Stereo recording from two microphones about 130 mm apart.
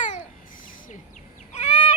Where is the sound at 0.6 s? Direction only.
90° left.